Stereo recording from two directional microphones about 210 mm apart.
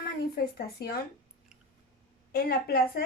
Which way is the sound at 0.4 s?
45° left (ahead or behind).